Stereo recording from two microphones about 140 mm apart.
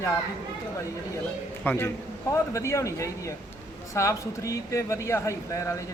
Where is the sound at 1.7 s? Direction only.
15° left (ahead or behind).